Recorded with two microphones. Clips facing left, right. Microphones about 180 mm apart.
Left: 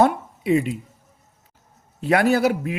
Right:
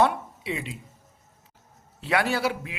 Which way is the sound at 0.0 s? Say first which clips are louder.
Left 5 dB; 45° left (ahead or behind).